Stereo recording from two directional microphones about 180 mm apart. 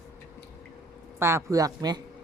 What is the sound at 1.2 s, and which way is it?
Speech, 15° right (ahead or behind).